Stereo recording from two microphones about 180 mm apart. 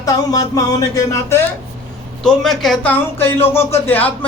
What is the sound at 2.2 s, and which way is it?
Speech, centre (ahead or behind).